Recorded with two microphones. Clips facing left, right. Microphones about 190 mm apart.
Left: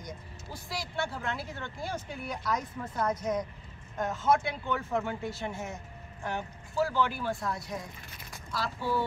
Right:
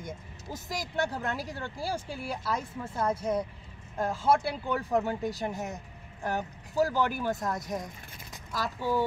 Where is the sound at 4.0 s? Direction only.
30° right (ahead or behind).